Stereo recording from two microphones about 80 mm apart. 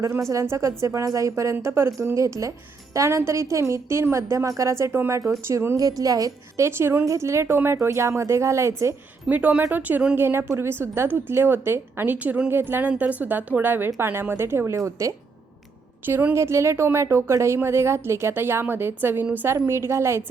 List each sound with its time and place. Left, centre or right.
0.0 s a woman's voice: right
6.7 s a woman's voice: right
9.3 s a woman's voice: centre
10.2 s a woman's voice: right
16.0 s a woman's voice: right